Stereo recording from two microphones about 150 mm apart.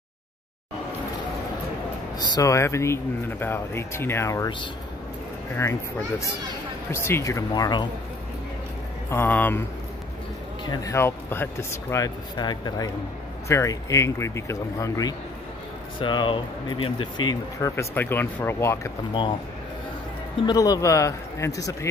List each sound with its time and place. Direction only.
2.1 s speech: 25° left (ahead or behind)
5.6 s speech: 20° left (ahead or behind)
9.1 s speech: 15° left (ahead or behind)
10.6 s speech: 25° left (ahead or behind)
20.4 s speech: 25° left (ahead or behind)